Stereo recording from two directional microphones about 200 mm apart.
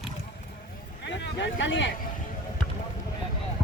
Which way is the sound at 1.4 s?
65° left (ahead or behind).